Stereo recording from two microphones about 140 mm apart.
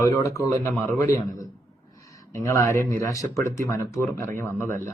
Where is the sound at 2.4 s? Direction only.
25° left (ahead or behind).